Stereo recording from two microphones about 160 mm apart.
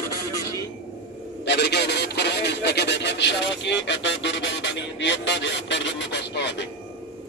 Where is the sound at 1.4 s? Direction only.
90° left.